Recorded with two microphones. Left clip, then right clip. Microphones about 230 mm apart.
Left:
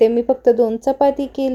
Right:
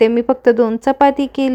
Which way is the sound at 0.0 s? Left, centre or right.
Right.